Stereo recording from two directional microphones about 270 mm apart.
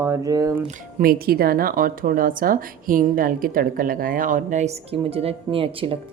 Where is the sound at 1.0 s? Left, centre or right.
Right.